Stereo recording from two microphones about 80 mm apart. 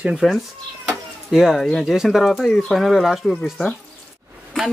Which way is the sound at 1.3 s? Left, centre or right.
Centre.